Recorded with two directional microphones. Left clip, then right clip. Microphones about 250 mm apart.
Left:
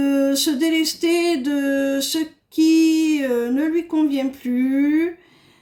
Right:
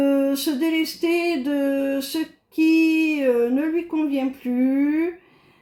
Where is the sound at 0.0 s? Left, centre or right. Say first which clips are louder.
Left 1 dB; left.